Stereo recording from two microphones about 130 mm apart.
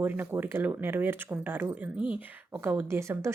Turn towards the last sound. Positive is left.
turn(degrees=-20)  # may be behind; listen again after turning